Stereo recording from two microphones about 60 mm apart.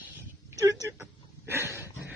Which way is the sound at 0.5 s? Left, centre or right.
Right.